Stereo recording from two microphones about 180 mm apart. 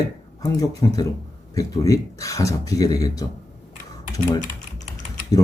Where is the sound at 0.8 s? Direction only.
20° left (ahead or behind).